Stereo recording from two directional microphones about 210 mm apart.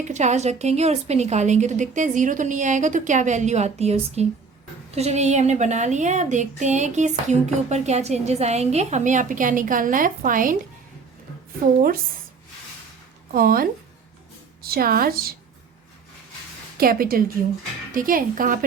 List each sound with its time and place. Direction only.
0.0 s a woman's voice: 35° right (ahead or behind)
13.3 s a woman's voice: 45° right (ahead or behind)
16.7 s a woman's voice: 45° right (ahead or behind)